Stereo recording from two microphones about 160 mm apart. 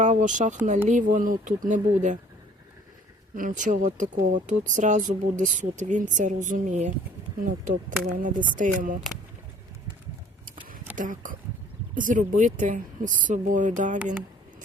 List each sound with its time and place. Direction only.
0.0 s speech: 50° right (ahead or behind)
3.3 s speech: 55° right (ahead or behind)
10.9 s speech: 55° right (ahead or behind)
14.0 s speech: 10° right (ahead or behind)